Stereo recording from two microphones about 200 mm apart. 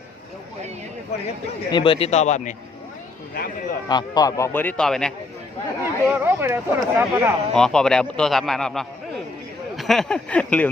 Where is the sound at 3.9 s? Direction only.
20° left (ahead or behind); by 5.1 s 5° left (ahead or behind).